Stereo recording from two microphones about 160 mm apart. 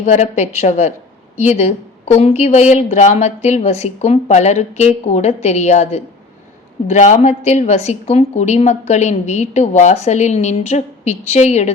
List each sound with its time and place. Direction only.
0.0 s a woman's voice: 45° left (ahead or behind)